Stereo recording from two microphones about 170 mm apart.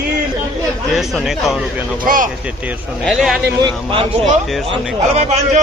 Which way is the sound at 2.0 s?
50° right (ahead or behind).